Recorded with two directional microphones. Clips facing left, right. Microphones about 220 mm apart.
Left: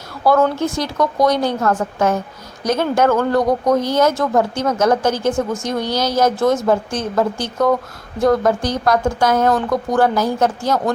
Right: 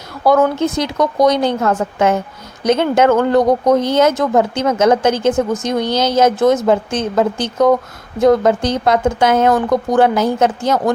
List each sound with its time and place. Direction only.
0.3 s speech: 20° right (ahead or behind)